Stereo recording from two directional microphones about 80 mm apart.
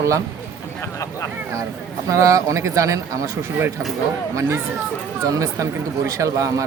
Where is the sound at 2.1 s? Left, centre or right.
Right.